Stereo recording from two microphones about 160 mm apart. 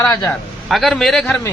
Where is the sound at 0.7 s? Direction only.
Centre (ahead or behind).